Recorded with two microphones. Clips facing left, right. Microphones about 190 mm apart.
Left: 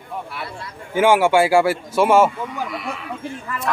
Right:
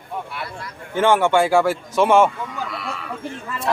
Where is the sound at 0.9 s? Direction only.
10° left (ahead or behind).